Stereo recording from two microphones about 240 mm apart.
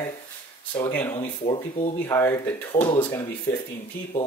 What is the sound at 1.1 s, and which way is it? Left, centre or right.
Speech, left.